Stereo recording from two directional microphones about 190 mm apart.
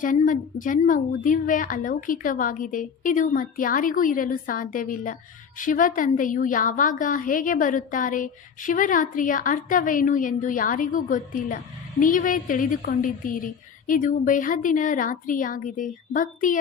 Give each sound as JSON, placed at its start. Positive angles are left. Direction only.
{"t": 0.0, "sound": "a woman's voice", "side_deg": 45}